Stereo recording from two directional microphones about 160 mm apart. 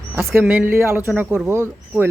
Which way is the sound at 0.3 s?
5° right (ahead or behind).